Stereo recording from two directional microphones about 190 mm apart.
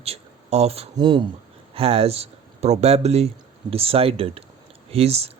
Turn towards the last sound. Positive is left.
turn(degrees=-30)  # may be behind; listen again after turning